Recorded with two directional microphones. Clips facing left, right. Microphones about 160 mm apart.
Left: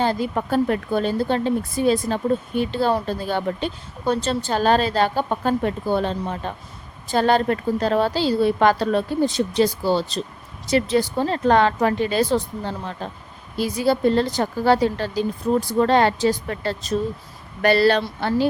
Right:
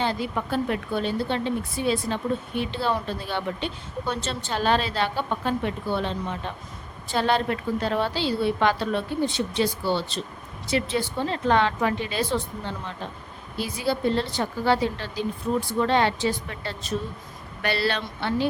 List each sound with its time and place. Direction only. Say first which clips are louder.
0.0 s speech: left 5 dB; 40° left (ahead or behind)